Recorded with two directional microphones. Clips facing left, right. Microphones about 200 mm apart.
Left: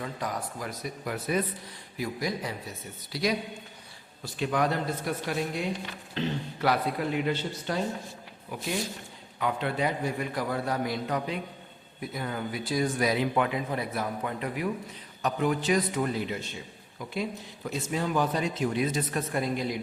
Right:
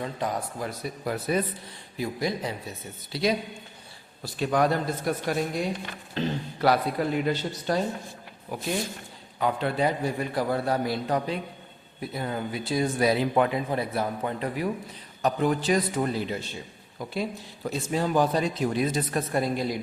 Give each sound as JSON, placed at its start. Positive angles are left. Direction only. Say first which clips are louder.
{"t": 0.0, "sound": "speech", "louder": "right 4 dB", "side_deg": -25}
{"t": 4.4, "sound": "speech", "louder": "right 3 dB", "side_deg": -40}